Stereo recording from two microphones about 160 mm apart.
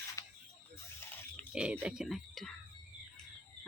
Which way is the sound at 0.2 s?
15° left (ahead or behind).